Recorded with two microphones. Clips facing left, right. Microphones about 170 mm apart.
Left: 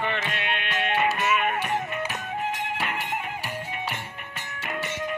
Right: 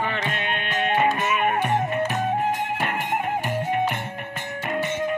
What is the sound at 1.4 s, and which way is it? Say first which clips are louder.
Music: right 5 dB; 50° right (ahead or behind).